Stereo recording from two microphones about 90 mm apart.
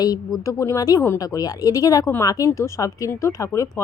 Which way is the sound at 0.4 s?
35° left (ahead or behind).